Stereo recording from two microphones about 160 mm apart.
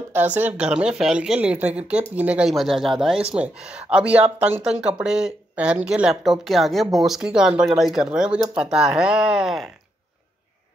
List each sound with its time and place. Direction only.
0.1 s speech: 10° right (ahead or behind)